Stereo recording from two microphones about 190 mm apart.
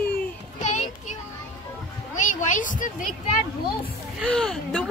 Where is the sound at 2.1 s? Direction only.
40° left (ahead or behind).